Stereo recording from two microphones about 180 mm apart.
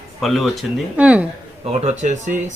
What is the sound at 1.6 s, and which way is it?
Speech, 35° right (ahead or behind).